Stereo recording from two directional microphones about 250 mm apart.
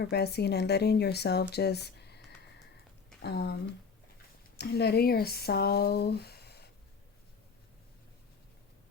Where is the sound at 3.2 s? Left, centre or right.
Left.